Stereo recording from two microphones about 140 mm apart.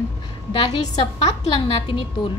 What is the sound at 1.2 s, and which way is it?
A woman's voice, 40° left (ahead or behind).